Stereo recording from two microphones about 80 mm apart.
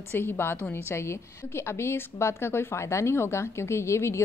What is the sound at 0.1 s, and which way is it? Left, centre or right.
A woman's voice, left.